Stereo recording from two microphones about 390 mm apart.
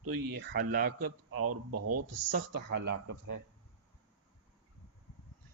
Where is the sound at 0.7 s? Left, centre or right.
Right.